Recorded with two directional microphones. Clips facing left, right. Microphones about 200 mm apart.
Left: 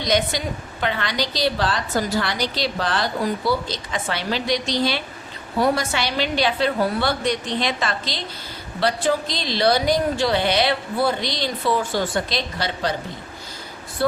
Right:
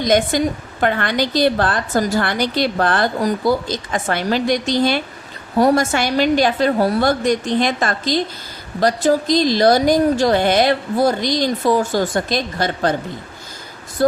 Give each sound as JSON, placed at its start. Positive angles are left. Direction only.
{"t": 0.0, "sound": "a woman's voice", "side_deg": -50}